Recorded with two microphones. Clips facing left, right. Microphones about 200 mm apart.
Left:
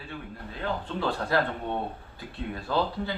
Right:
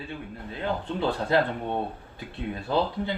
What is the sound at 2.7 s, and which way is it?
Speech, 20° right (ahead or behind).